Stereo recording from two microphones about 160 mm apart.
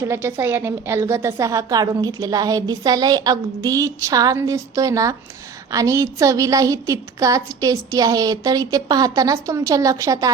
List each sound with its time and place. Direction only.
0.0 s a woman's voice: 15° right (ahead or behind)